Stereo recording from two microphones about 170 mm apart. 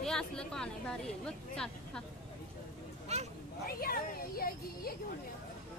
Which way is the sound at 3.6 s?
60° left (ahead or behind).